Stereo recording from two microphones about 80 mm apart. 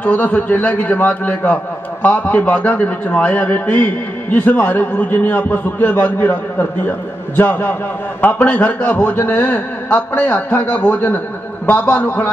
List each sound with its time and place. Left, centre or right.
0.0 s a man's voice: left
7.3 s a man's voice: left